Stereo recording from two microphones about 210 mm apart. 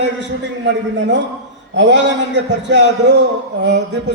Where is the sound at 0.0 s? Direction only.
55° right (ahead or behind).